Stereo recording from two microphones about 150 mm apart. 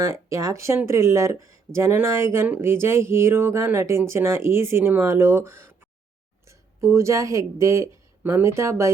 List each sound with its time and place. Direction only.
0.0 s speech: 20° right (ahead or behind)